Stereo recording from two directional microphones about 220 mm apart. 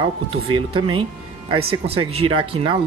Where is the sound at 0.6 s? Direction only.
20° right (ahead or behind).